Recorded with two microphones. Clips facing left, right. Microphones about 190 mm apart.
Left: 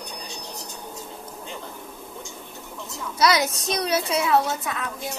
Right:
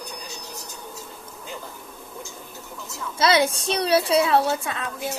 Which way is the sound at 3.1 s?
25° right (ahead or behind).